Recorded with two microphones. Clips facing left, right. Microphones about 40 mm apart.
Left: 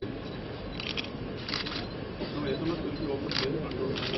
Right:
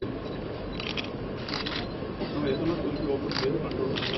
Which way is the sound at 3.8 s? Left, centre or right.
Right.